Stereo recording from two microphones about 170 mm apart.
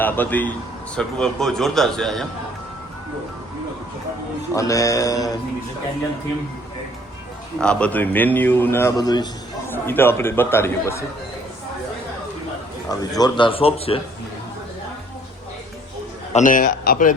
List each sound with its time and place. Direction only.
0.0 s a man's voice: 10° left (ahead or behind)
4.5 s mantra: 20° left (ahead or behind)
7.6 s a man's voice: 5° left (ahead or behind); by 9.2 s 20° left (ahead or behind)
9.6 s a man's voice: 10° left (ahead or behind)
12.9 s a man's voice: 20° left (ahead or behind)
16.3 s a man's voice: 50° left (ahead or behind)